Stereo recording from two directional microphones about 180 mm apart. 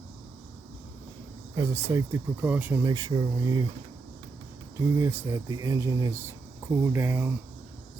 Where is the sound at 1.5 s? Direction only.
15° right (ahead or behind).